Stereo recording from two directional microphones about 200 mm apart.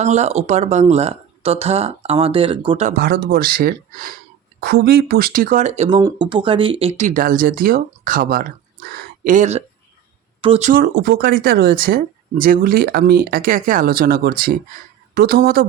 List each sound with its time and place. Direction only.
0.0 s speech: 35° right (ahead or behind)
2.9 s speech: 50° right (ahead or behind); by 6.0 s 35° right (ahead or behind)
6.0 s speech: 20° right (ahead or behind)
10.8 s speech: 55° right (ahead or behind)